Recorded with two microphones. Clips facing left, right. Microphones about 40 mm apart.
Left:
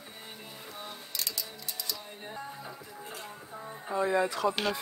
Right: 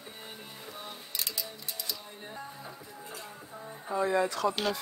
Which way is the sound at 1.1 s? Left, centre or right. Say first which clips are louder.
Even; centre.